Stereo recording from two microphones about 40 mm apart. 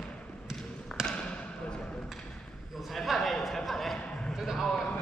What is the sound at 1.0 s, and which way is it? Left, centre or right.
Basketball bounce, centre.